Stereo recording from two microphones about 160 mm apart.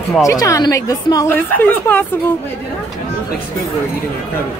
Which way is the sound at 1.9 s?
10° left (ahead or behind).